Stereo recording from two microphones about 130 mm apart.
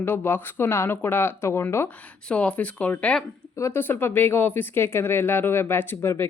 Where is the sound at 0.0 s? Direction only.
15° left (ahead or behind).